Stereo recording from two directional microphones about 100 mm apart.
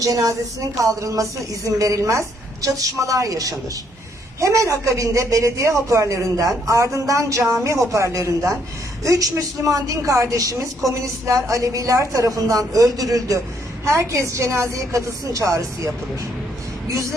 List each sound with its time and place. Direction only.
0.0 s speech: 35° right (ahead or behind)
16.9 s a woman's voice: 30° right (ahead or behind)